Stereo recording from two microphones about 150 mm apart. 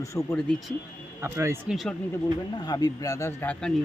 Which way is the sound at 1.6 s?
Centre (ahead or behind).